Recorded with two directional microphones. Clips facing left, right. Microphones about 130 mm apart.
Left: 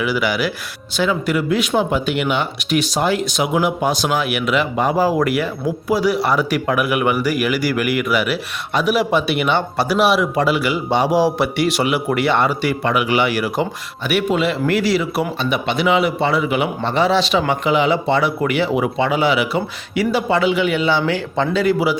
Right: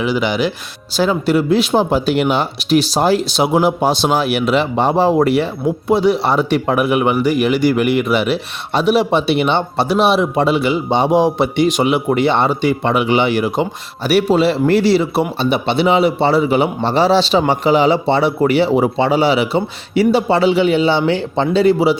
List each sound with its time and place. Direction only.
0.0 s speech: 25° right (ahead or behind)
14.1 s a man's voice: 35° right (ahead or behind)